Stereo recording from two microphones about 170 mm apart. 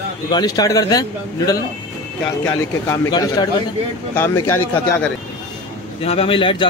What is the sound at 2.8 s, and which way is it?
A man's voice, 20° left (ahead or behind).